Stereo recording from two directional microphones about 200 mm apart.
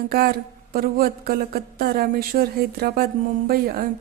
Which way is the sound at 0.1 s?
50° right (ahead or behind).